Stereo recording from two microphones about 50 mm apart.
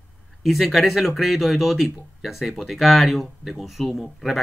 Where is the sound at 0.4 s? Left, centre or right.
Centre.